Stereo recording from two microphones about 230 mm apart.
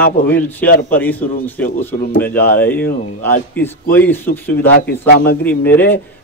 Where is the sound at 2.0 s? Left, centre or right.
Left.